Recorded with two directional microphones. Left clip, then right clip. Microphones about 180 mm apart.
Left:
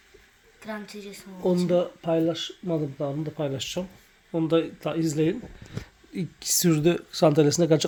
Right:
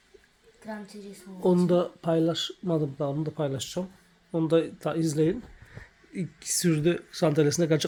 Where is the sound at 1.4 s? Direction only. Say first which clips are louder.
Even; 15° right (ahead or behind); by 5.3 s centre (ahead or behind).